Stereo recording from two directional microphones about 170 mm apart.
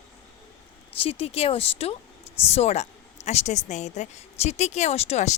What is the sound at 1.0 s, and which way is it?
Speech, 35° left (ahead or behind).